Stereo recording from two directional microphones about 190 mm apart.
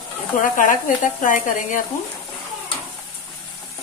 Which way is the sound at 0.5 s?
45° left (ahead or behind).